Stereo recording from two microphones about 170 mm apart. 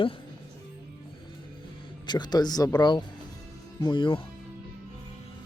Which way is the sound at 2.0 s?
25° left (ahead or behind).